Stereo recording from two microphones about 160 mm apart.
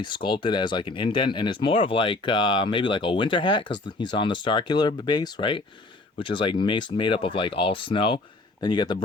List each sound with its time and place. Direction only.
0.0 s speech: 30° left (ahead or behind)